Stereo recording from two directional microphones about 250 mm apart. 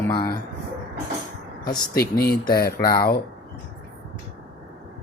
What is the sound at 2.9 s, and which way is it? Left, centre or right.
Speech, left.